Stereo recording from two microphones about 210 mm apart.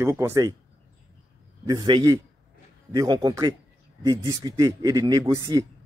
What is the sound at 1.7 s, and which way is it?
A man's voice, 20° right (ahead or behind).